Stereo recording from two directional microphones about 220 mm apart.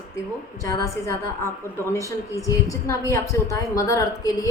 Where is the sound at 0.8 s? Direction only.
15° left (ahead or behind).